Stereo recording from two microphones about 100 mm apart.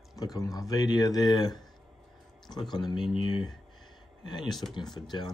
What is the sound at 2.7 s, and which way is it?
Speech, 45° left (ahead or behind).